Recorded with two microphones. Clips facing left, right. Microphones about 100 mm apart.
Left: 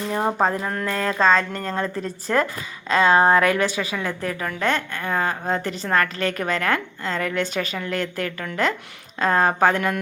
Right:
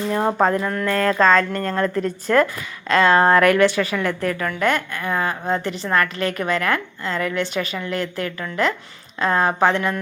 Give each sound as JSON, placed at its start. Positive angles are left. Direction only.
{"t": 0.1, "sound": "speech", "side_deg": 5}
{"t": 0.4, "sound": "a woman's voice", "side_deg": 30}
{"t": 2.9, "sound": "a woman's voice", "side_deg": 15}